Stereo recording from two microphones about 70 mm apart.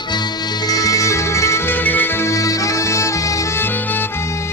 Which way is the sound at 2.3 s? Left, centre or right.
Left.